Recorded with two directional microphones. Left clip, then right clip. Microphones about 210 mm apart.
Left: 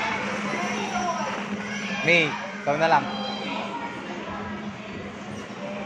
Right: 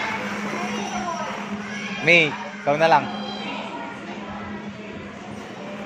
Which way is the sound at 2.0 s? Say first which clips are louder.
Right 4 dB; 50° right (ahead or behind).